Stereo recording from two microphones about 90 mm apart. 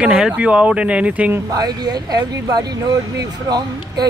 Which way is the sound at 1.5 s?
50° right (ahead or behind).